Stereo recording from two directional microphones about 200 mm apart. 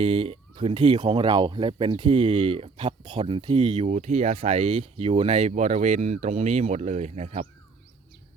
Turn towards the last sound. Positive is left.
turn(degrees=-35)  # may be behind; listen again after turning